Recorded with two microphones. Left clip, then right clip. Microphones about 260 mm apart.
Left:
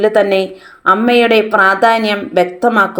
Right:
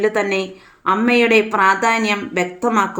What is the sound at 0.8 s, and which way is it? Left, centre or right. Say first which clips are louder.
Speech: left 5 dB; centre.